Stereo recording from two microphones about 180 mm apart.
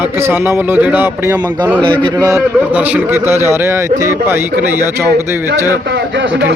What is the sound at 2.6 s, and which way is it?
Speech, 10° right (ahead or behind).